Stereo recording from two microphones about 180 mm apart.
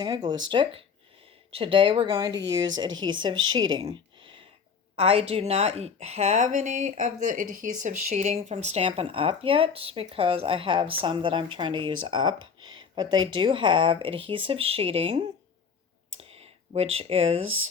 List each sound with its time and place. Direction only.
0.0 s speech: 20° right (ahead or behind)
3.5 s a sound: 25° right (ahead or behind)
4.9 s a woman's voice: 30° right (ahead or behind)